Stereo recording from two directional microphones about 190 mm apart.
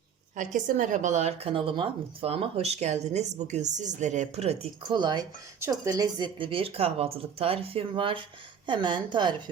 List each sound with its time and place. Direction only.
0.3 s a woman's voice: 40° right (ahead or behind); by 9.3 s 25° right (ahead or behind)